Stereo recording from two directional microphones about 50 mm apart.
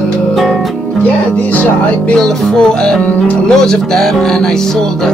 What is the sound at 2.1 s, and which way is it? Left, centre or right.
Music, centre.